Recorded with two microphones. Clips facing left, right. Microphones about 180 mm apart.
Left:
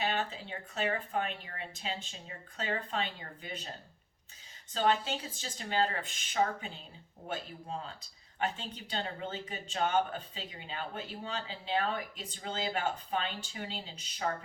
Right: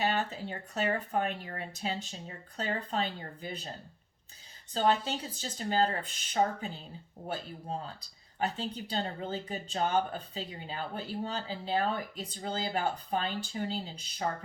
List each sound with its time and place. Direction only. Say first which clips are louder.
0.0 s speech: right 3 dB; 40° right (ahead or behind)
4.7 s speech: right 2 dB; 40° right (ahead or behind)
8.4 s speech: right 3 dB; 35° right (ahead or behind)